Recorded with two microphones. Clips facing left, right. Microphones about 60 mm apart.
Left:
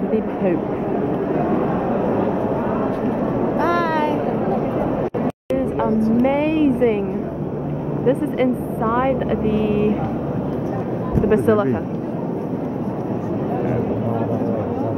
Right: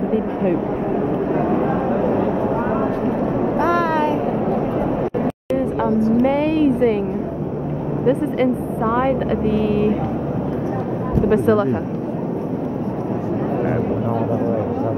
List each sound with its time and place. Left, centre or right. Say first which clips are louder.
3.5 s a sound: right 2 dB; centre
5.9 s vehicle: right 1 dB; left
6.2 s vehicle: even; centre
8.1 s speech: even; centre
11.3 s speech: even; centre